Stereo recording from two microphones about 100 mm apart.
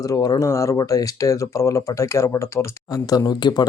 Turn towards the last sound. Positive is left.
turn(degrees=45)  # may be behind; listen again after turning